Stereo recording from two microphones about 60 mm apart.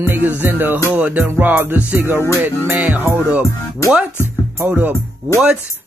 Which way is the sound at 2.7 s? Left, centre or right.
Right.